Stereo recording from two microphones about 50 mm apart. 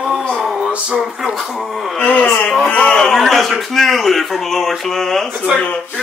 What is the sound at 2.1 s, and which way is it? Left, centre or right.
Speech, left.